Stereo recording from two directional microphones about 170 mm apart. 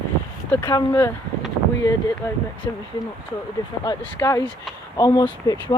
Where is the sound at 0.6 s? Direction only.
20° left (ahead or behind).